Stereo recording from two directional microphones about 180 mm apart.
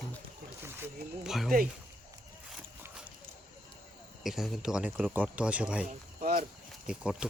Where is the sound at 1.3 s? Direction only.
Centre (ahead or behind).